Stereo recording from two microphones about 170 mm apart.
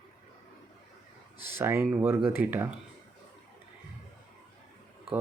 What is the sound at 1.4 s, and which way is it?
Speech, 15° right (ahead or behind).